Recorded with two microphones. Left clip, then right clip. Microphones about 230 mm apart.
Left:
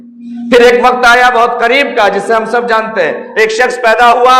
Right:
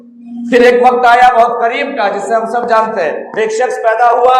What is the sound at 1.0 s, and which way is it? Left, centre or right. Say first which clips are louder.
A man's voice: even; left.